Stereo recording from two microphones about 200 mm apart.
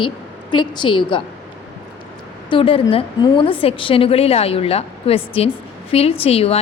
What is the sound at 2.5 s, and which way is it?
A woman's voice, 25° left (ahead or behind).